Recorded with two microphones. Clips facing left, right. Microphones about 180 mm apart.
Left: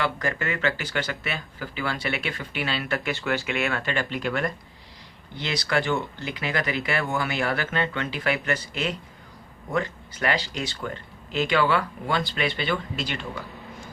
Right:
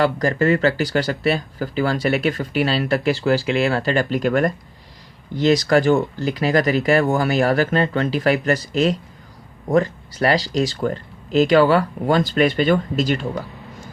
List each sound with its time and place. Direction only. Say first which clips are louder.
0.0 s speech: right 10 dB; 35° right (ahead or behind)